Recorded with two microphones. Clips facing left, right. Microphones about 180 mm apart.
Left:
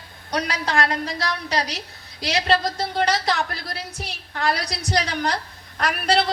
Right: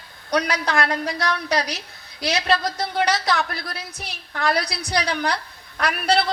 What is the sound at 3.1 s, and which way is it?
A woman's voice, 35° left (ahead or behind).